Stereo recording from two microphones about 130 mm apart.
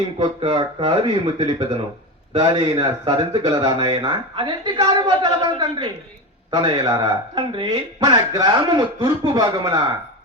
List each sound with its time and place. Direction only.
0.2 s speech: 40° right (ahead or behind)